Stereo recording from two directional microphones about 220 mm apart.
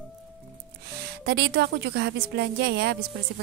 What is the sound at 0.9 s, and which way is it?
A woman's voice, 50° right (ahead or behind).